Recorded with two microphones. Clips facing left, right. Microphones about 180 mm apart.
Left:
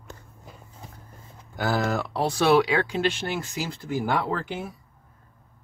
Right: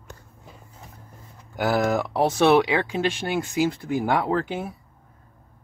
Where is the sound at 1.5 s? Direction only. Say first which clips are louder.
Right 3 dB; 15° right (ahead or behind).